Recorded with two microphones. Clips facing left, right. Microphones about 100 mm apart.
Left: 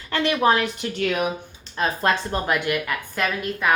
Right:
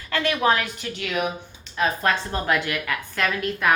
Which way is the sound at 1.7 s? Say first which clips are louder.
Even; 25° left (ahead or behind).